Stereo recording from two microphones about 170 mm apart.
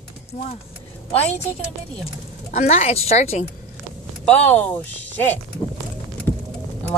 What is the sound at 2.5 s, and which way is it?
Speech, 40° left (ahead or behind).